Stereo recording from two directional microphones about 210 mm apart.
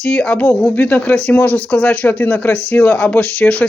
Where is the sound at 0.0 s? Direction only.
5° left (ahead or behind).